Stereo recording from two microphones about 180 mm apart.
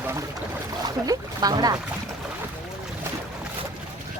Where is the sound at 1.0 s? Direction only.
20° right (ahead or behind).